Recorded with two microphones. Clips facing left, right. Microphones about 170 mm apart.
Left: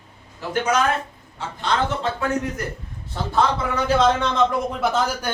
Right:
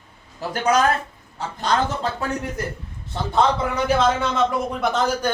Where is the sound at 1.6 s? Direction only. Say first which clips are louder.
Right 1 dB; 35° right (ahead or behind).